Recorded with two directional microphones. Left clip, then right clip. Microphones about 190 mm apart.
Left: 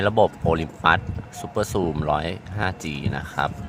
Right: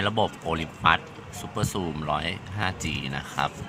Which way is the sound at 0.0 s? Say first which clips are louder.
Left 6 dB; 40° left (ahead or behind).